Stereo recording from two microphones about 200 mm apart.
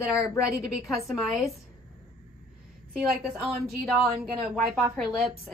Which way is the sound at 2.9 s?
5° right (ahead or behind).